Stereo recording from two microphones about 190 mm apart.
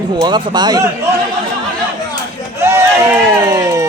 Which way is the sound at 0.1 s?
25° right (ahead or behind).